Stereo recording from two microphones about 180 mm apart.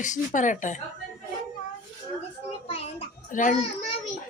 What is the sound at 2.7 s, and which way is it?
Speech, 30° left (ahead or behind).